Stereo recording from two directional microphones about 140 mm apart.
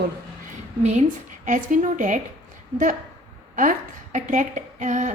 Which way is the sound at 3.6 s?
65° right (ahead or behind).